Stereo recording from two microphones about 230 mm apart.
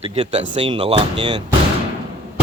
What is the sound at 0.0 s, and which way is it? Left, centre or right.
Speech, right.